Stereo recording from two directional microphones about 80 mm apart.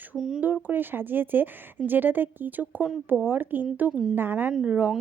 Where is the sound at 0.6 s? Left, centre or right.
Right.